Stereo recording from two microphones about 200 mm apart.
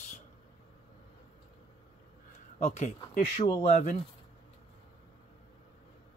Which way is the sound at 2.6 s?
35° left (ahead or behind).